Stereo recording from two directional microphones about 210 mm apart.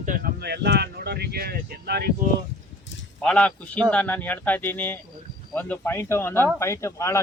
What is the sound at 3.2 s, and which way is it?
A man's voice, 5° left (ahead or behind).